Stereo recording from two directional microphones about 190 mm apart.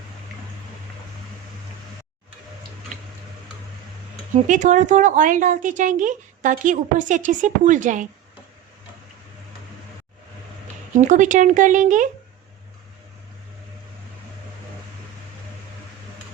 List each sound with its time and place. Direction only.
4.4 s a woman's voice: 40° right (ahead or behind)
10.9 s a woman's voice: 40° right (ahead or behind)